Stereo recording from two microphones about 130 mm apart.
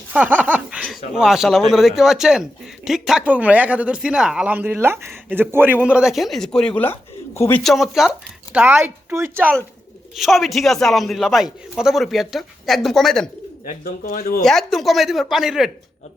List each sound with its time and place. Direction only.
0.1 s laughter: 10° right (ahead or behind)
0.8 s speech: centre (ahead or behind)
7.3 s speech: 20° left (ahead or behind)
7.6 s speech: centre (ahead or behind)
8.5 s speech: 15° right (ahead or behind)
10.2 s speech: centre (ahead or behind)
13.7 s speech: 90° left
14.4 s speech: centre (ahead or behind)